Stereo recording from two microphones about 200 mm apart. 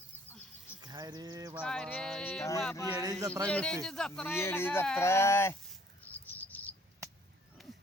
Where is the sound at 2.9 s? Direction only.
15° right (ahead or behind).